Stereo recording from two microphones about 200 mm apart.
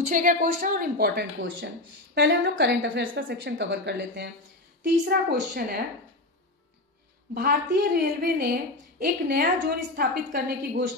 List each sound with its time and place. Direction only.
0.1 s a woman's voice: 45° right (ahead or behind)
7.3 s a woman's voice: 50° right (ahead or behind)